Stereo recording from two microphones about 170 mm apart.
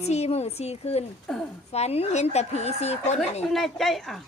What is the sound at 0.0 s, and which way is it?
A woman's voice, 40° left (ahead or behind).